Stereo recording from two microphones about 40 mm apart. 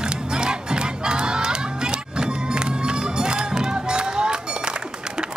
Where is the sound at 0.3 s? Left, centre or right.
Centre.